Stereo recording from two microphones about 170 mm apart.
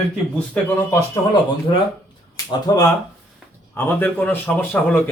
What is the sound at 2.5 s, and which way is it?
Speech, 20° left (ahead or behind).